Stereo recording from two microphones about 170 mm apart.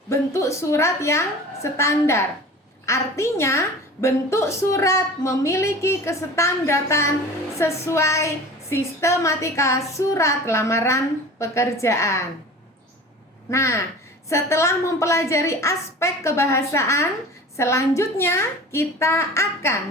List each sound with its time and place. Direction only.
0.1 s a woman's voice: 15° left (ahead or behind)
13.5 s a woman's voice: 15° left (ahead or behind)